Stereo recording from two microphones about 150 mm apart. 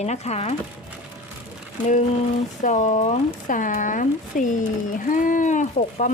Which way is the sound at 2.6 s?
55° left (ahead or behind).